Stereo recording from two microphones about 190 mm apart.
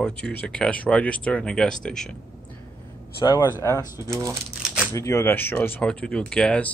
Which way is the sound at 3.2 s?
20° left (ahead or behind).